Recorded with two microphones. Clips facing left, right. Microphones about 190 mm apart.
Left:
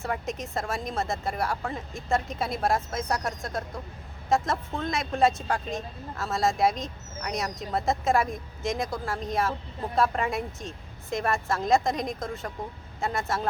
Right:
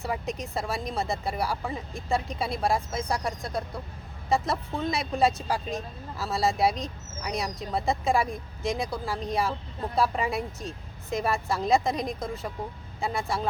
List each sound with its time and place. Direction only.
0.0 s speech: centre (ahead or behind)